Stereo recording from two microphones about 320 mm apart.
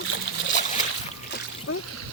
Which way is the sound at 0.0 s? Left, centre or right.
Left.